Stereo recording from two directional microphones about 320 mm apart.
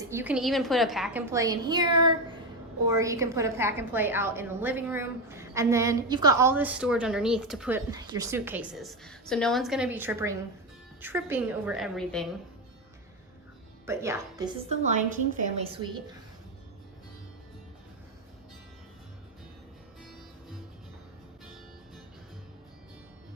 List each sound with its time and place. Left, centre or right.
0.1 s a woman's voice: centre
13.8 s a woman's voice: centre